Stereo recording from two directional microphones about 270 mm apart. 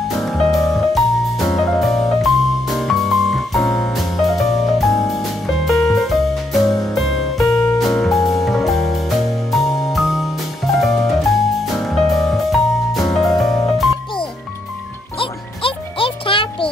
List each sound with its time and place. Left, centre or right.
0.2 s music: centre
15.1 s music: centre